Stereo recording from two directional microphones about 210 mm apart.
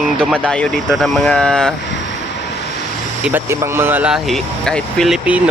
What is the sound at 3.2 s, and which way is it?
Speech, 10° right (ahead or behind).